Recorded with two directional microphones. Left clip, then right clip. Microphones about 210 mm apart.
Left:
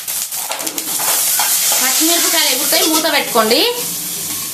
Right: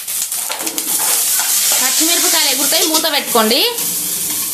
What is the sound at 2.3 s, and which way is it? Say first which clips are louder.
Sizzle: even; 40° right (ahead or behind).